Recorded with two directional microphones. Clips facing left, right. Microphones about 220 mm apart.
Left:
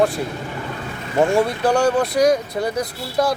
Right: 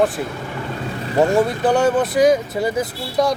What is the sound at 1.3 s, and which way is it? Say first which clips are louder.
Speech: right 1 dB; centre (ahead or behind).